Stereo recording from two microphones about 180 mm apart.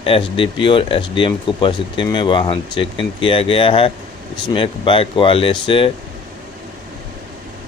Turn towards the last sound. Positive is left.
turn(degrees=30)  # may be behind; listen again after turning